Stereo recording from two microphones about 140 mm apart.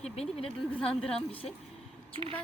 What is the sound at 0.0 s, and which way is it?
Speech, 45° left (ahead or behind).